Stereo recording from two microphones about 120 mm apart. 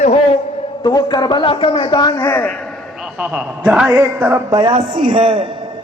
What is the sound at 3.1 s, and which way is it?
A man's voice, 10° right (ahead or behind).